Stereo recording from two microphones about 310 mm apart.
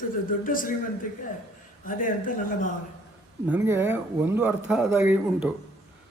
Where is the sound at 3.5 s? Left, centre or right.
Centre.